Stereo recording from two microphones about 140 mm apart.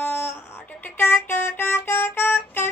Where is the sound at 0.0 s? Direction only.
15° left (ahead or behind).